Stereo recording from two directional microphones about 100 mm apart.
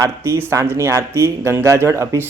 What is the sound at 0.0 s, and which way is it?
A man's voice, 25° right (ahead or behind).